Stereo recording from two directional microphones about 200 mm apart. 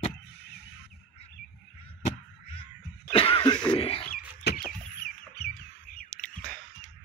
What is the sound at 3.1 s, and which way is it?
Cough, 25° left (ahead or behind).